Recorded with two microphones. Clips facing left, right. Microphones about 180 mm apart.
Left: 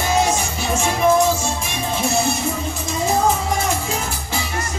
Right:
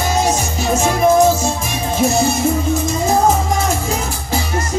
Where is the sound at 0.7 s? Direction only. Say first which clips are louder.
Right 3 dB; 40° right (ahead or behind).